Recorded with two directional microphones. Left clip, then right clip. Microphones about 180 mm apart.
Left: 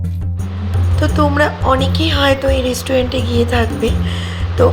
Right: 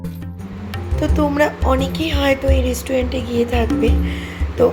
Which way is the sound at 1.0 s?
Centre (ahead or behind).